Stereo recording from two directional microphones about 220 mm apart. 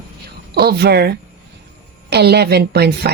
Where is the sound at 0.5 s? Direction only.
45° right (ahead or behind).